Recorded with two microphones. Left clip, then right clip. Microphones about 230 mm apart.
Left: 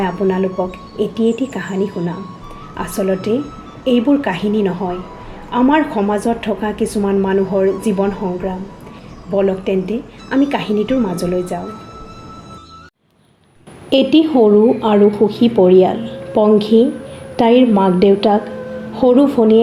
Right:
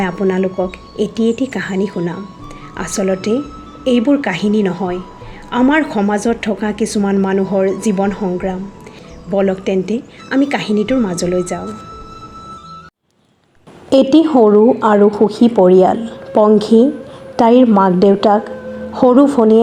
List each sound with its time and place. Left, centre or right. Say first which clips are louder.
0.0 s a woman's voice: right 1 dB; right
13.9 s a woman's voice: right 2 dB; right